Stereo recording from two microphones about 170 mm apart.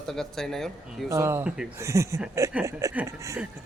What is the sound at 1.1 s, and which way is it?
Speech, 15° right (ahead or behind).